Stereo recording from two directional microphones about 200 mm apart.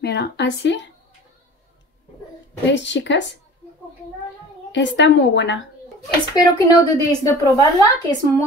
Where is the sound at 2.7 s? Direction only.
65° left (ahead or behind).